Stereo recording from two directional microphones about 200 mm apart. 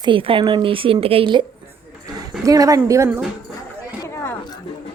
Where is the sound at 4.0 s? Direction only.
15° left (ahead or behind).